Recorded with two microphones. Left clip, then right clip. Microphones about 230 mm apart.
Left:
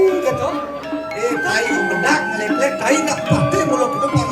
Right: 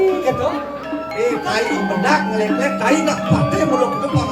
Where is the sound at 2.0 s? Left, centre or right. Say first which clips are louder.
Right 1 dB; left.